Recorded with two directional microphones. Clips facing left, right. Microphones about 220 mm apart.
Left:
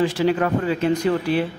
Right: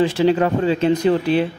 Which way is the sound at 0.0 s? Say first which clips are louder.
Right 3 dB; 25° right (ahead or behind).